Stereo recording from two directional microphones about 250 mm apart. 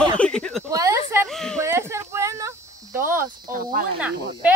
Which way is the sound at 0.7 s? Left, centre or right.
Centre.